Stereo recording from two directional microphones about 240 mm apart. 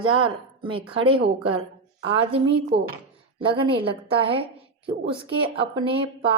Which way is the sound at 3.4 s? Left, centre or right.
Right.